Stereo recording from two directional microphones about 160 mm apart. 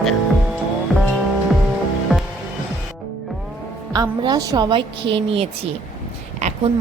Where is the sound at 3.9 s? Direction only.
25° right (ahead or behind).